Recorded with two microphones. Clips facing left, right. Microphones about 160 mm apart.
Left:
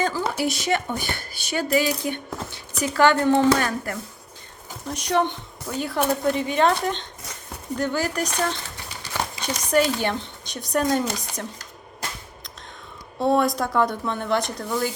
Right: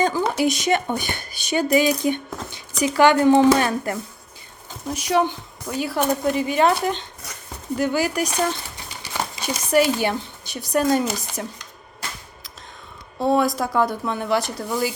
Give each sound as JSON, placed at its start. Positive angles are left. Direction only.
{"t": 0.0, "sound": "speech", "side_deg": -15}
{"t": 4.9, "sound": "a woman's voice", "side_deg": -5}
{"t": 13.1, "sound": "a woman's voice", "side_deg": 0}